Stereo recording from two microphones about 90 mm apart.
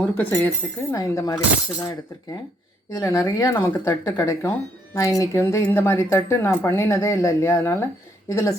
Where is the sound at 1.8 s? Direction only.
55° left (ahead or behind).